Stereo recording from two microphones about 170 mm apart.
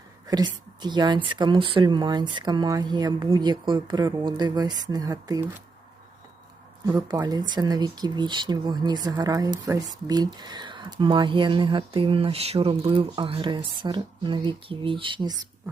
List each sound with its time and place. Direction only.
0.3 s speech: 25° right (ahead or behind)
6.8 s speech: 20° right (ahead or behind)